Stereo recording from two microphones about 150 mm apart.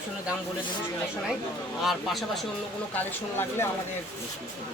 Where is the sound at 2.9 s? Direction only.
15° left (ahead or behind).